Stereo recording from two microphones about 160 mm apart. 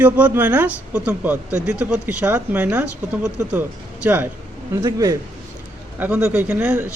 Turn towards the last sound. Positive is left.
turn(degrees=-10)  # may be behind; listen again after turning